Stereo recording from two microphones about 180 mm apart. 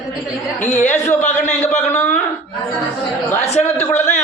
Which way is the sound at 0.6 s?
40° left (ahead or behind).